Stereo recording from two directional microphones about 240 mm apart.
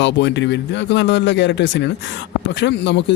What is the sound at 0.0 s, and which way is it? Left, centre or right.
Speech, left.